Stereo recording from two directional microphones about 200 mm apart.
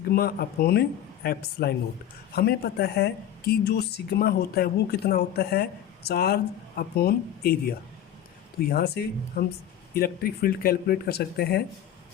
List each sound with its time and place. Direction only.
0.1 s speech: 50° left (ahead or behind)